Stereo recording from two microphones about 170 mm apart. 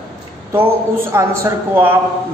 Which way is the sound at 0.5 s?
15° right (ahead or behind).